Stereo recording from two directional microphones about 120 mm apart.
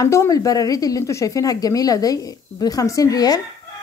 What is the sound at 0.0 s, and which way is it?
A woman's voice, 25° left (ahead or behind).